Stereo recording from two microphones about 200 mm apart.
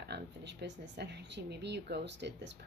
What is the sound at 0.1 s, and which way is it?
Speech, 55° right (ahead or behind).